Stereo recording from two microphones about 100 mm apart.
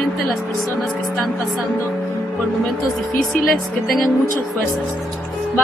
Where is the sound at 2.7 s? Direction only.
Centre (ahead or behind).